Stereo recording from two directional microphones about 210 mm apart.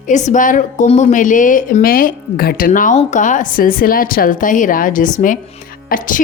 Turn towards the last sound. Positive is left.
turn(degrees=40)  # may be behind; listen again after turning